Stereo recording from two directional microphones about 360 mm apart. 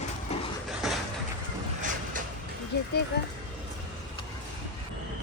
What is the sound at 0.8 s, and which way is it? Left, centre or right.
Vehicle, centre.